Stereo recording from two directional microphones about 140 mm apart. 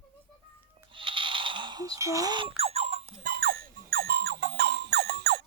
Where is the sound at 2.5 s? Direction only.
45° right (ahead or behind).